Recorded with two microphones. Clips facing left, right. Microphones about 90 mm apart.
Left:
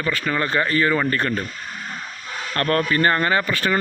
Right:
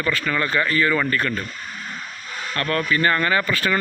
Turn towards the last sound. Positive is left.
turn(degrees=25)  # may be behind; listen again after turning